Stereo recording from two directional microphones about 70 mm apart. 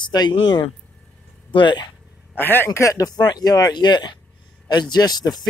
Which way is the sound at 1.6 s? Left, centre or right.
Left.